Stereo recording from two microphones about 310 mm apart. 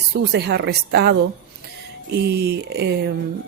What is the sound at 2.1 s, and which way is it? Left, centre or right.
Speech, right.